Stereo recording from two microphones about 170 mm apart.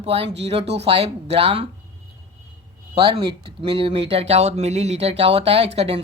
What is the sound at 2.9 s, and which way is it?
Speech, 30° right (ahead or behind).